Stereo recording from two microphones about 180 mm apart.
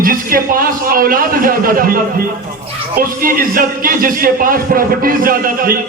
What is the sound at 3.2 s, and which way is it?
Speech, 50° right (ahead or behind).